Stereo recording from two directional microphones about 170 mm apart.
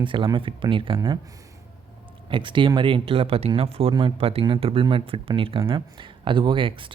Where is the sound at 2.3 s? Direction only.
30° right (ahead or behind).